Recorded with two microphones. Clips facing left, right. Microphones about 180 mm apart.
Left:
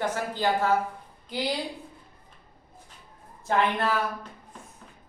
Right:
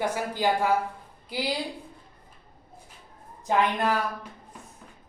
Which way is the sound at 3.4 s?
15° right (ahead or behind).